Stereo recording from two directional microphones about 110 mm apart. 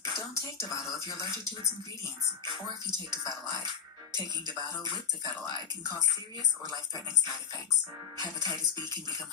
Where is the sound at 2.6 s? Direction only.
40° right (ahead or behind).